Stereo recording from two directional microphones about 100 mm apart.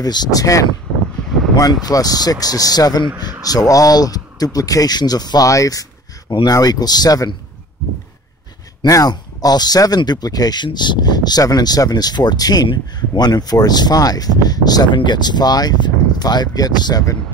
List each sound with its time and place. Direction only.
0.0 s speech: 40° left (ahead or behind)
8.8 s speech: 40° left (ahead or behind)